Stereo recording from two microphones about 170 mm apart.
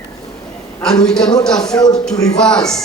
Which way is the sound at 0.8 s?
5° left (ahead or behind).